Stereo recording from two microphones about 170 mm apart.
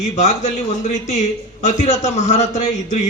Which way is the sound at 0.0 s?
45° left (ahead or behind).